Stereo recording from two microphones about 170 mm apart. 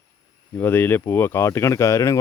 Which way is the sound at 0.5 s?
10° left (ahead or behind).